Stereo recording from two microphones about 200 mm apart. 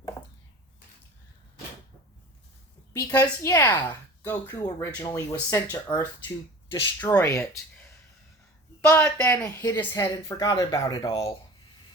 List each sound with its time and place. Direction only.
3.0 s speech: 15° left (ahead or behind)
8.9 s speech: 15° left (ahead or behind)